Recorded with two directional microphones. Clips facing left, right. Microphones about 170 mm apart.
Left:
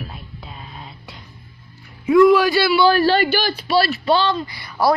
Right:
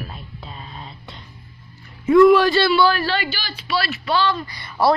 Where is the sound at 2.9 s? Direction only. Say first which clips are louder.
Left 7 dB; 40° left (ahead or behind).